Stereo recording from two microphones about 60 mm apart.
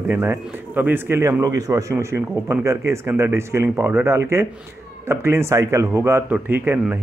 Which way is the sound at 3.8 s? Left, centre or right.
Right.